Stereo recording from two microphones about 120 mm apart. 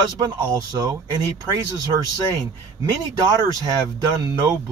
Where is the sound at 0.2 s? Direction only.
35° right (ahead or behind).